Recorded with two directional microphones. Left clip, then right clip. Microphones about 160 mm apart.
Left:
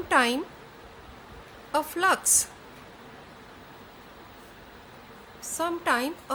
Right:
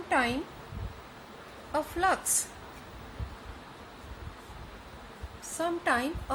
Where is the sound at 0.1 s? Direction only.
45° left (ahead or behind).